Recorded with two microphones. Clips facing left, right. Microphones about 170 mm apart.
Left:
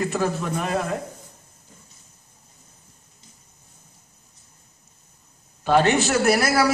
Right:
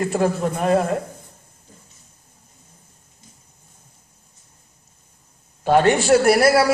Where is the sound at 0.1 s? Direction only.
30° right (ahead or behind).